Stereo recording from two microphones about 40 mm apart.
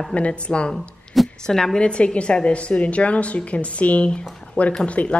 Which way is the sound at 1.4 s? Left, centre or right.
Centre.